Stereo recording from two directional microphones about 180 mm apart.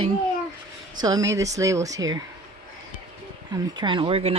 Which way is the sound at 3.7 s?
25° right (ahead or behind).